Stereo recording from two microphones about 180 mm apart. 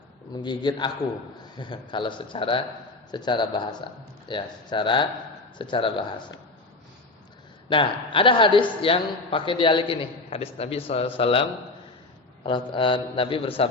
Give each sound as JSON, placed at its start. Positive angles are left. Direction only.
{"t": 0.4, "sound": "a woman's voice", "side_deg": 25}
{"t": 7.7, "sound": "a woman's voice", "side_deg": 30}